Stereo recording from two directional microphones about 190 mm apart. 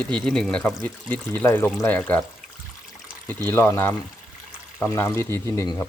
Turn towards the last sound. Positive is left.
turn(degrees=15)  # may be behind; listen again after turning